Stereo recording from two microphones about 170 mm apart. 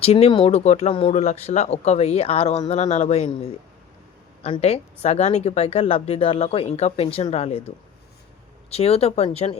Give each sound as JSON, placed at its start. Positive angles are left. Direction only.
{"t": 0.0, "sound": "speech", "side_deg": 35}
{"t": 4.4, "sound": "speech", "side_deg": 35}
{"t": 8.7, "sound": "speech", "side_deg": 35}